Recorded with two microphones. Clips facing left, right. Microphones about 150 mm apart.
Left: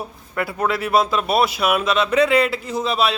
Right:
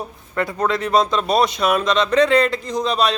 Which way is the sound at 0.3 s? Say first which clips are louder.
Right 1 dB; 5° left (ahead or behind).